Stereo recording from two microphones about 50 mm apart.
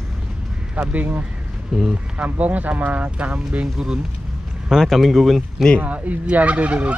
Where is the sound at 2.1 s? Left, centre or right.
Right.